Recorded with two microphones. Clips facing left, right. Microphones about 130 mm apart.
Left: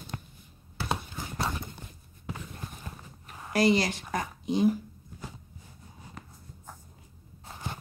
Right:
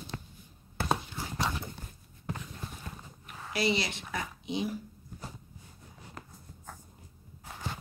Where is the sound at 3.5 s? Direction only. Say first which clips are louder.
Left 6 dB; 45° left (ahead or behind).